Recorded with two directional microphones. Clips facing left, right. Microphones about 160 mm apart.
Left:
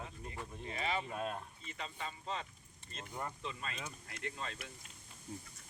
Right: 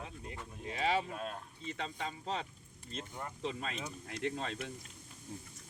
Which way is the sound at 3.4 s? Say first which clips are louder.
Right 5 dB; 90° right.